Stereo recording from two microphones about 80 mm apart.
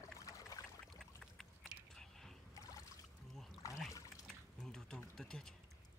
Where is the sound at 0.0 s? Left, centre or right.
Left.